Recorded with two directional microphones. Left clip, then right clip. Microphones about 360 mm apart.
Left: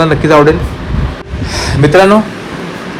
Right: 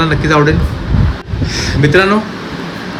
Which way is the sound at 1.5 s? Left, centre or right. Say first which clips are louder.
Left 3 dB; centre.